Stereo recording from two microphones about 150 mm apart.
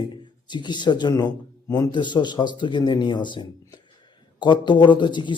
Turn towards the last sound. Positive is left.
turn(degrees=30)  # may be behind; listen again after turning